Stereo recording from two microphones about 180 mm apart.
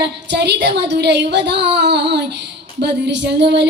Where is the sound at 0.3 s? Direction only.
70° right (ahead or behind).